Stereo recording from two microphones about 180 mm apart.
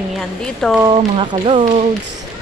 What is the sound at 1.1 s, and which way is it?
Speech, 30° right (ahead or behind).